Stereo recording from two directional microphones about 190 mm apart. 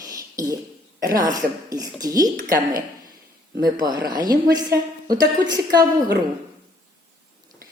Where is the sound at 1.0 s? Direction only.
20° right (ahead or behind).